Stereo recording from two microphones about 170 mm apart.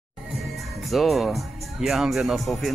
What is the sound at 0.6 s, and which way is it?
Speech, centre (ahead or behind).